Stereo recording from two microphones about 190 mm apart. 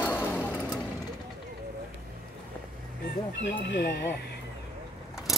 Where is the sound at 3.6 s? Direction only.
60° left (ahead or behind).